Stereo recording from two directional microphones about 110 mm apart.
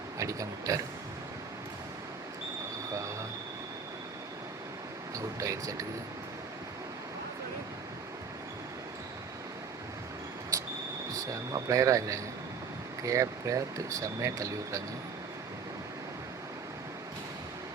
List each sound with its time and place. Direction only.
0.2 s speech: 30° right (ahead or behind)
2.9 s train: 30° right (ahead or behind)
5.1 s speech: 30° right (ahead or behind)
11.3 s speech: 30° right (ahead or behind)